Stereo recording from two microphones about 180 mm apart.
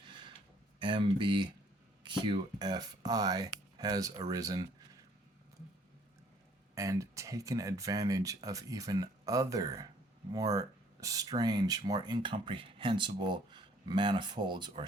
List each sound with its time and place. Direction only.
0.0 s a sound: 25° right (ahead or behind)
0.8 s speech: 25° right (ahead or behind)
6.7 s speech: 15° right (ahead or behind)